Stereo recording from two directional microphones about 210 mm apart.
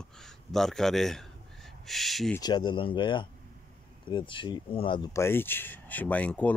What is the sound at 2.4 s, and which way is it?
Speech, 20° left (ahead or behind).